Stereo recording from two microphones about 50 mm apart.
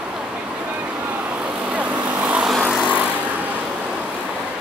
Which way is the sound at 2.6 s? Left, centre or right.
Right.